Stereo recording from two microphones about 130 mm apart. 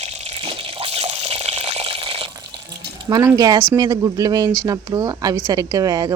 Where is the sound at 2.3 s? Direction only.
30° right (ahead or behind).